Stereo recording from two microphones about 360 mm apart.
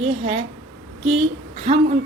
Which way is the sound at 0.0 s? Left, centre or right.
Centre.